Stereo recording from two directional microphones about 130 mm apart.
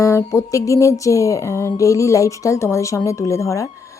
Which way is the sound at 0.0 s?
25° left (ahead or behind).